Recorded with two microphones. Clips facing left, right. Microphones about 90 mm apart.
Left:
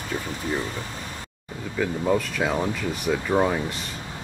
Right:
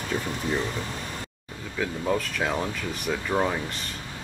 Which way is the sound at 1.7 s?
5° left (ahead or behind).